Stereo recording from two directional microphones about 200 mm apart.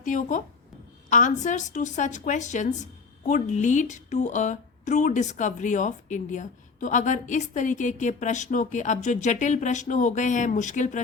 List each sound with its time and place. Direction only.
0.0 s speech: 40° left (ahead or behind)